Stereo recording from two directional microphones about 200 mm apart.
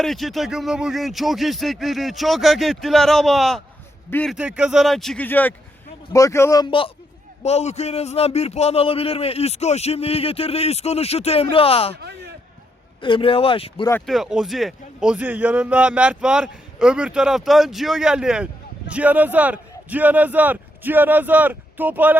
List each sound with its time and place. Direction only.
0.0 s a man's voice: centre (ahead or behind)
4.4 s a man's voice: 5° right (ahead or behind); by 11.9 s 30° left (ahead or behind)
11.9 s a man's voice: 55° right (ahead or behind)
13.0 s speech: 25° left (ahead or behind)
14.1 s a man's voice: centre (ahead or behind)